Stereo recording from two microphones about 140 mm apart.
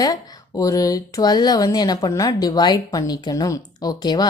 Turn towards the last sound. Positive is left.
turn(degrees=30)  # may be behind; listen again after turning